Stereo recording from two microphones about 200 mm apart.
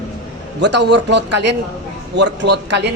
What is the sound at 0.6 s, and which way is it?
A woman's voice, 60° right (ahead or behind).